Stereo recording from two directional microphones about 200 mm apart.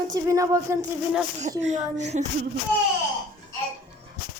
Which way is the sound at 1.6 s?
35° right (ahead or behind).